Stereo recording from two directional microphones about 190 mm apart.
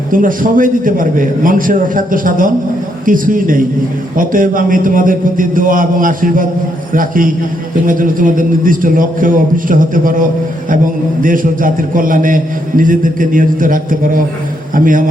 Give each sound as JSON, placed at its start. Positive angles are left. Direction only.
{"t": 0.1, "sound": "a man's voice", "side_deg": -45}